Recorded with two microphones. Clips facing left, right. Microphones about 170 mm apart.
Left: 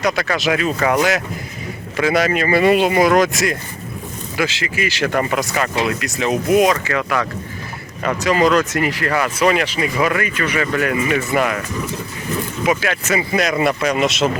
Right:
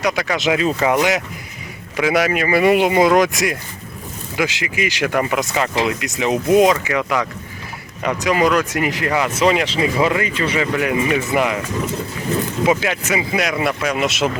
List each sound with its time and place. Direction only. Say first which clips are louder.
0.0 s speech: even; 15° right (ahead or behind)
2.0 s speech: even; 10° right (ahead or behind)
12.6 s speech: even; 20° right (ahead or behind)